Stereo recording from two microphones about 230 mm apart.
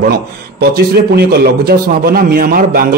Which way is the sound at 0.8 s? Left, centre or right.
Right.